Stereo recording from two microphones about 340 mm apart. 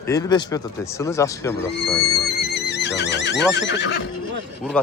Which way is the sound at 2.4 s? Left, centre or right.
Left.